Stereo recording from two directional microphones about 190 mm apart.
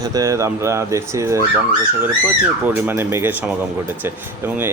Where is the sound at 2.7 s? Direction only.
10° right (ahead or behind).